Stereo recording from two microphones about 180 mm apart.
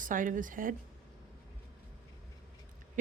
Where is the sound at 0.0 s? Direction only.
45° right (ahead or behind).